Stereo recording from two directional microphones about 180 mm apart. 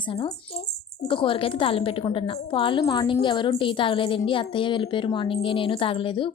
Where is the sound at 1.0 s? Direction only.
30° left (ahead or behind).